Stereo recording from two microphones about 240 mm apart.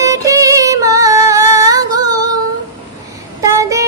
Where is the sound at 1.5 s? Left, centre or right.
Centre.